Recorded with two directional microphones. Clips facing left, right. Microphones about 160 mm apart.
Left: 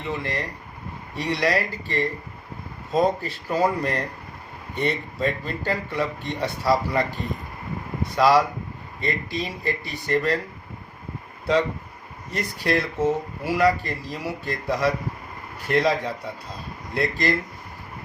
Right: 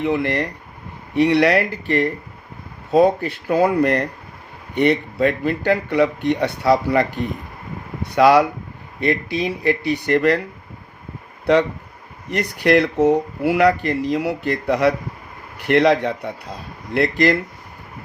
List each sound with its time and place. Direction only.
0.0 s speech: 70° right (ahead or behind)
8.1 s speech: 60° right (ahead or behind)
12.3 s speech: 70° right (ahead or behind)